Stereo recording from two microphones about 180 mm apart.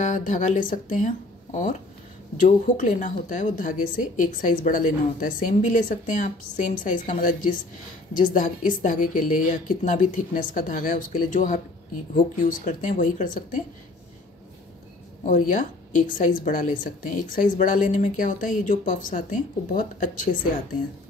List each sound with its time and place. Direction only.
0.0 s speech: 45° left (ahead or behind)
15.2 s speech: 45° left (ahead or behind)